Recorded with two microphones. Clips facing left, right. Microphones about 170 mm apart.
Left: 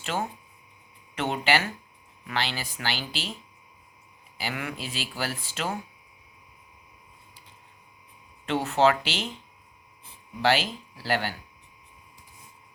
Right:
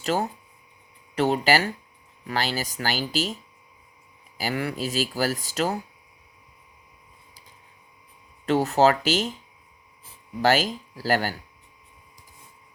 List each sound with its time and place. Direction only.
0.0 s speech: 40° right (ahead or behind)
4.4 s speech: 40° right (ahead or behind)
8.4 s speech: 40° right (ahead or behind)
10.4 s speech: 40° right (ahead or behind)